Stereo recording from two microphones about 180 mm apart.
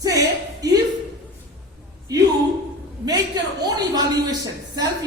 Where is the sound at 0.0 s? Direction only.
20° right (ahead or behind).